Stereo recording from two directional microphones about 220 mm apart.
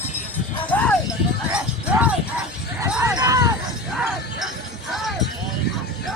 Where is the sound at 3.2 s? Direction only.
15° right (ahead or behind).